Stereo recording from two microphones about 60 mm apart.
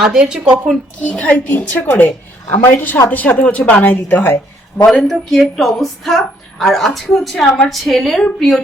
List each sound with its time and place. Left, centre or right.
0.0 s speech: centre
1.0 s a woman's voice: left
1.5 s a woman's voice: left
4.9 s a woman's voice: centre